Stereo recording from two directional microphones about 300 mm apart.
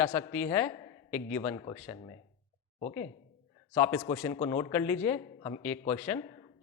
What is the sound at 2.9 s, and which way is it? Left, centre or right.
Speech, left.